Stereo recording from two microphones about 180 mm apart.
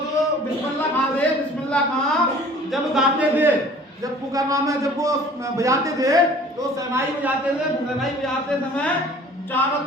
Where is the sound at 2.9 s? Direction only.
5° right (ahead or behind).